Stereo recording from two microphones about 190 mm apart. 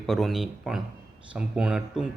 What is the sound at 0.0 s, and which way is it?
A man's voice, centre (ahead or behind).